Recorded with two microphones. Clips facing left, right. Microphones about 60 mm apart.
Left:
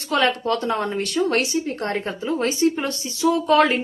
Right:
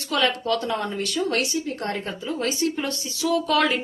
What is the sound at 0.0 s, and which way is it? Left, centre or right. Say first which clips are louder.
Speech: left 3 dB; left.